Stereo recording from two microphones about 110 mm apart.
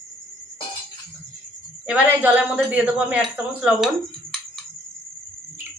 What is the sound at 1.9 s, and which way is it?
A woman's voice, 10° right (ahead or behind).